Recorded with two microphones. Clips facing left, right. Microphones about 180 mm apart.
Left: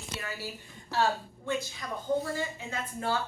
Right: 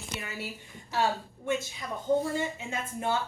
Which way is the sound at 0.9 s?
20° right (ahead or behind).